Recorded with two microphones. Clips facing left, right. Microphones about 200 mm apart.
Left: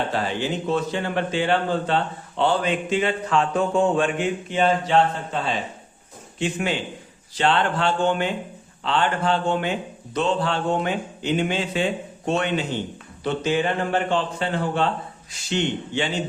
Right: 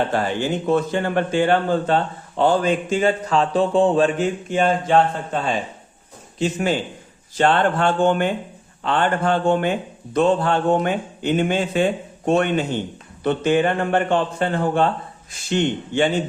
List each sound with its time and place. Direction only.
0.1 s a man's voice: 50° right (ahead or behind)